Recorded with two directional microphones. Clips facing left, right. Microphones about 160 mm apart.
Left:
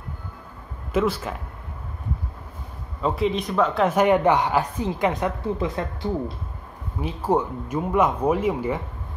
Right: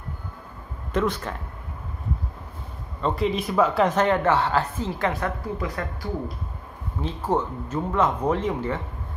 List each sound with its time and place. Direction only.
0.9 s speech: 5° left (ahead or behind)
3.0 s speech: 5° left (ahead or behind)
3.9 s a woman's voice: 15° left (ahead or behind)
7.0 s a woman's voice: 10° left (ahead or behind)